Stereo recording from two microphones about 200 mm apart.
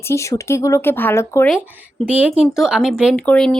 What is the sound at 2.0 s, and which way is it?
Speech, 5° right (ahead or behind).